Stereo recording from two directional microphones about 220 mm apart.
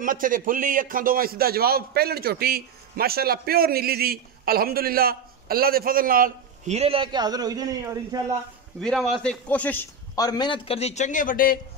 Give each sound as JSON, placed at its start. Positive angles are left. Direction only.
{"t": 0.0, "sound": "a man's voice", "side_deg": -40}
{"t": 8.8, "sound": "a man's voice", "side_deg": 0}